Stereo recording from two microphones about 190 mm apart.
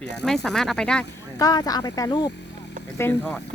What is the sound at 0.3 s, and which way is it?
Speech, centre (ahead or behind).